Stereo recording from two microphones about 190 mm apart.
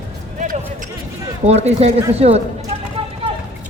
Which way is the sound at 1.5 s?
35° right (ahead or behind).